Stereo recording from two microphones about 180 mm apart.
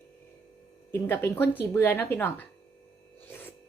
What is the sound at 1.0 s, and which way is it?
Speech, 10° left (ahead or behind).